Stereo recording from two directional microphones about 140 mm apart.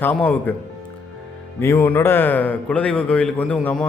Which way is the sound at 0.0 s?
10° left (ahead or behind).